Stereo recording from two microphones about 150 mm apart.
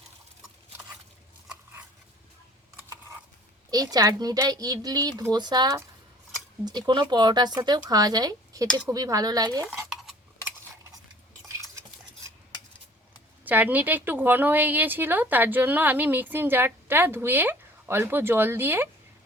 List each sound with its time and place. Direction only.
3.7 s speech: 25° right (ahead or behind)
9.6 s stir: centre (ahead or behind)
13.4 s speech: 10° right (ahead or behind)